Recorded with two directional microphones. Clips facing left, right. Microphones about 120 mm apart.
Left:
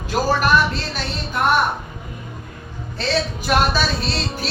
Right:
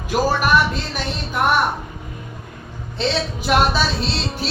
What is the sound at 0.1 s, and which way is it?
Speech, 15° right (ahead or behind).